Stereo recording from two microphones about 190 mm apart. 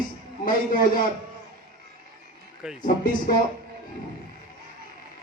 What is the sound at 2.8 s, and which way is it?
Speech, 45° left (ahead or behind).